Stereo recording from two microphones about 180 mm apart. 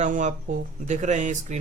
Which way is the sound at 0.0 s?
45° right (ahead or behind).